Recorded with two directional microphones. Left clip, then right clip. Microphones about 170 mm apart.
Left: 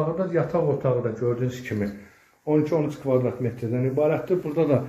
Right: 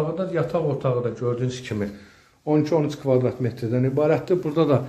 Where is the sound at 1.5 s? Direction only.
20° right (ahead or behind).